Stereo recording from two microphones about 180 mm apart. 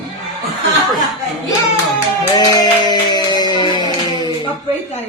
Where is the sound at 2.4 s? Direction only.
20° left (ahead or behind).